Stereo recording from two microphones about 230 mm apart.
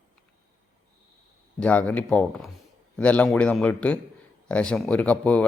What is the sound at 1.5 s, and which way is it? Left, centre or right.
Speech, centre.